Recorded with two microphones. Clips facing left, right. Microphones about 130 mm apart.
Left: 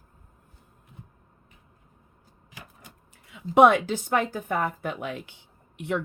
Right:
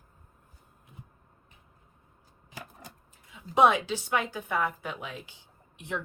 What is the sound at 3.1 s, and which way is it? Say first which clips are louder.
A woman's voice: left 7 dB; 60° left (ahead or behind).